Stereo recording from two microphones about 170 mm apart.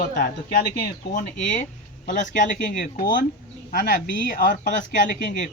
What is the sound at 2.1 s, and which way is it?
Speech, 50° left (ahead or behind).